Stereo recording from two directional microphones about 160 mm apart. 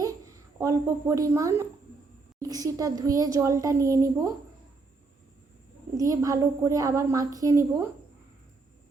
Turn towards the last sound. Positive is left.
turn(degrees=-20)  # may be behind; listen again after turning